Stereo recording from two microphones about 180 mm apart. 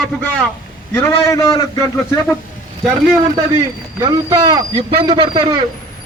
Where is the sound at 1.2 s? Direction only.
20° left (ahead or behind).